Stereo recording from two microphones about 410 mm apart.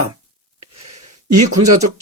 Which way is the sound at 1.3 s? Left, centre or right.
Right.